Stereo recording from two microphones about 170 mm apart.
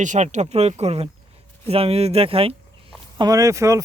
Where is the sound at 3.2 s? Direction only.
20° right (ahead or behind).